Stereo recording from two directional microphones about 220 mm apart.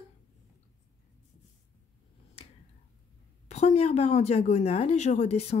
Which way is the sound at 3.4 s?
30° left (ahead or behind).